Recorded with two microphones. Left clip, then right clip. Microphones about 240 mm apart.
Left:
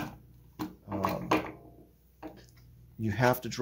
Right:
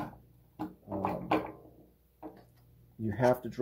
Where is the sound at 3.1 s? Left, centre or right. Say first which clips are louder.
Even; left.